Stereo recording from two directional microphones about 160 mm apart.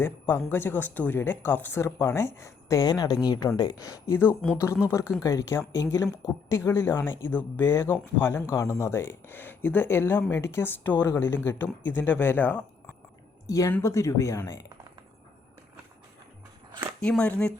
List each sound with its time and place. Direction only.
0.0 s speech: 15° left (ahead or behind)
17.0 s speech: 5° left (ahead or behind)